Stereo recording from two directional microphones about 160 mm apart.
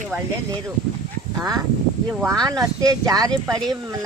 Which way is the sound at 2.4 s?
25° right (ahead or behind).